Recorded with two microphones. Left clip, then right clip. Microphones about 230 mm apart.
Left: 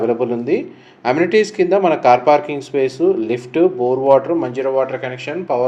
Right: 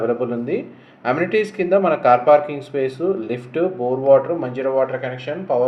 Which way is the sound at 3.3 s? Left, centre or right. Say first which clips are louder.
Left 6 dB; left.